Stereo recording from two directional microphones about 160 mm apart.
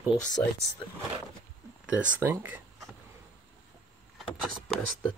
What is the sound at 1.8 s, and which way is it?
Speech, 10° right (ahead or behind).